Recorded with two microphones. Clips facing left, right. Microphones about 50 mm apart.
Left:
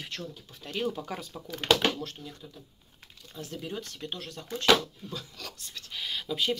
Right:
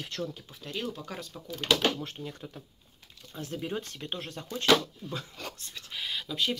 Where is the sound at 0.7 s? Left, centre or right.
Centre.